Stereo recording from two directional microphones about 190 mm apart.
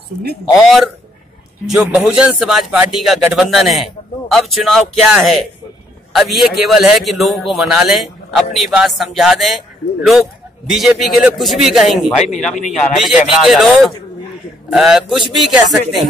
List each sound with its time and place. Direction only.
0.6 s a man's voice: centre (ahead or behind)
10.7 s a man's voice: centre (ahead or behind)
12.2 s a man's voice: 40° left (ahead or behind)
12.6 s a man's voice: centre (ahead or behind)